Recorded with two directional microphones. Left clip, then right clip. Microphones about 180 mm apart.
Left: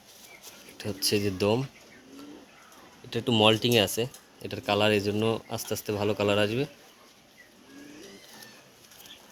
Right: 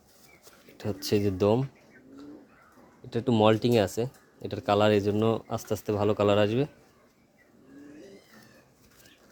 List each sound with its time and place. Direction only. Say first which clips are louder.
0.8 s speech: even; 35° right (ahead or behind)
3.1 s speech: left 1 dB; 30° right (ahead or behind)